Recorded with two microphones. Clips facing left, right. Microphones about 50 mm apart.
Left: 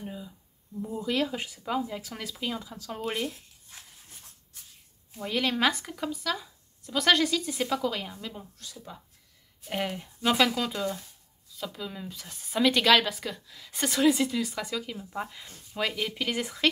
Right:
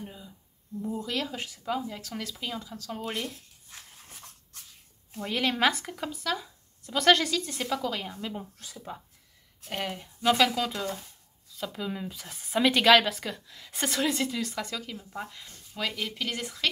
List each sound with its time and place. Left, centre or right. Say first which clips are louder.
0.0 s a sound: left 3 dB; centre
0.9 s speech: left 6 dB; centre
5.2 s a woman's voice: even; centre
8.4 s speech: right 3 dB; right
9.7 s a woman's voice: left 2 dB; centre